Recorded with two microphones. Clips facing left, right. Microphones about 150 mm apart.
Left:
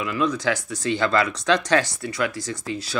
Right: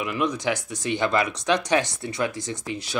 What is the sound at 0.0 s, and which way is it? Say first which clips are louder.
Speech: left 2 dB; 20° right (ahead or behind).